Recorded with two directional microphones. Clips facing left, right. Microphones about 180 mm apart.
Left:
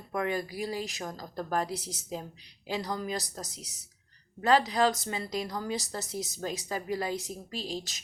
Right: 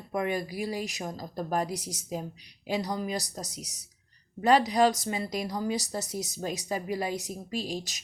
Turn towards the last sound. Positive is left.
turn(degrees=-15)  # may be behind; listen again after turning